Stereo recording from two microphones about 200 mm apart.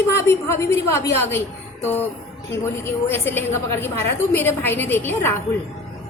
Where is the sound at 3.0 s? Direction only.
10° left (ahead or behind).